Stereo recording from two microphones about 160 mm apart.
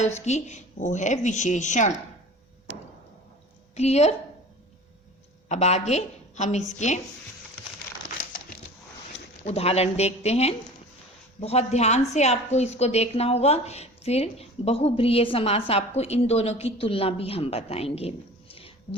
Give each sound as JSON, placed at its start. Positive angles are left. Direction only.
{"t": 0.0, "sound": "speech", "side_deg": 45}
{"t": 3.8, "sound": "speech", "side_deg": 45}
{"t": 5.5, "sound": "a woman's voice", "side_deg": 45}
{"t": 9.4, "sound": "a woman's voice", "side_deg": 40}